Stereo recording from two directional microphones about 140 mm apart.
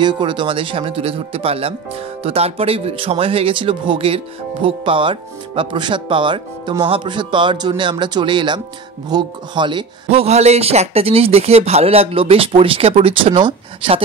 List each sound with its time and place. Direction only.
0.0 s speech: 35° right (ahead or behind)